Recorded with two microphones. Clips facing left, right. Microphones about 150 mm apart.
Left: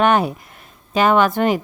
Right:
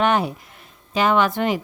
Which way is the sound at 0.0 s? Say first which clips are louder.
Left 3 dB; 50° left (ahead or behind).